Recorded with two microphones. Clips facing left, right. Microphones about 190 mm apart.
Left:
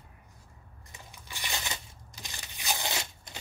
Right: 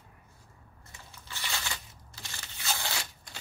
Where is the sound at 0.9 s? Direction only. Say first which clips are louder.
Even; 15° left (ahead or behind).